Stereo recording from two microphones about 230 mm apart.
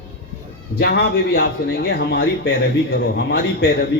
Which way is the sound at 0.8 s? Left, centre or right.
Left.